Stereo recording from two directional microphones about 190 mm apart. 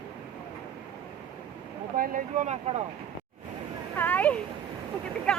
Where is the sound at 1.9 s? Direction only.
45° right (ahead or behind).